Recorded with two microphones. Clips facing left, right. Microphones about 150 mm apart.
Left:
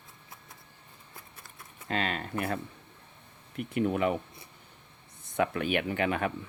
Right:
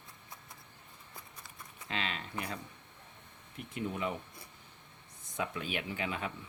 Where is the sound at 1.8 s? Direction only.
45° left (ahead or behind).